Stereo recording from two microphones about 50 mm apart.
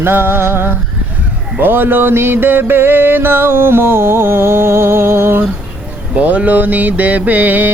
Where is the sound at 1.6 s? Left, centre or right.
Right.